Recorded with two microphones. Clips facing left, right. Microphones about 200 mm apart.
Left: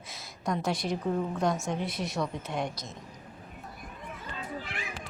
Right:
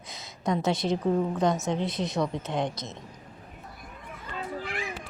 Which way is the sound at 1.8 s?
20° right (ahead or behind).